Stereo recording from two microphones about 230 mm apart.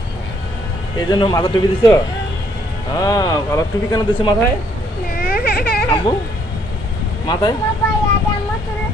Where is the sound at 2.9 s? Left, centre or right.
Centre.